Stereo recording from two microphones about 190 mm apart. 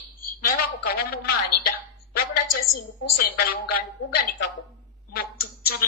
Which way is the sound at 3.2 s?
50° left (ahead or behind).